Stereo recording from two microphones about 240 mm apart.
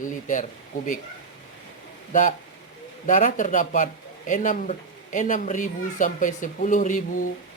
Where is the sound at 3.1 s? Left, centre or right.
Left.